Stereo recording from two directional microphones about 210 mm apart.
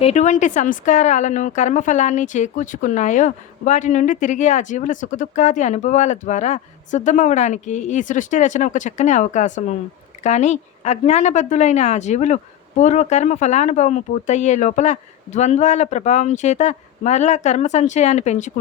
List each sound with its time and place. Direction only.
0.0 s speech: 35° left (ahead or behind)